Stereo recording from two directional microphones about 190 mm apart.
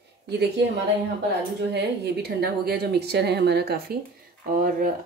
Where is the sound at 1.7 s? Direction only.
60° right (ahead or behind).